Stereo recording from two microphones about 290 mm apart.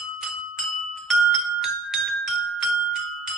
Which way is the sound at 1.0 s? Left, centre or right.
Centre.